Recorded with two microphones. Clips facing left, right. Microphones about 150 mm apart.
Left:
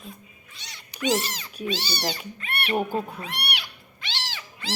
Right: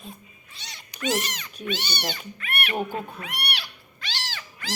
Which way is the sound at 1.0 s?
25° left (ahead or behind).